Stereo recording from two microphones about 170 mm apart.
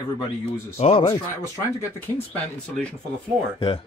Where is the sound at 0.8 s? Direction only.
35° left (ahead or behind).